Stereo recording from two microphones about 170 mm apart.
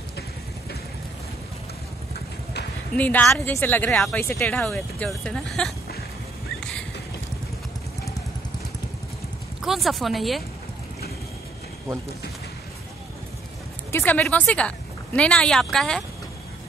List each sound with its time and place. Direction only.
3.0 s a woman's voice: 10° left (ahead or behind)
9.6 s speech: centre (ahead or behind)
13.9 s a woman's voice: 10° left (ahead or behind)